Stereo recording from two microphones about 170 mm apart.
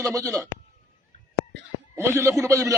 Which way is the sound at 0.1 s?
20° right (ahead or behind).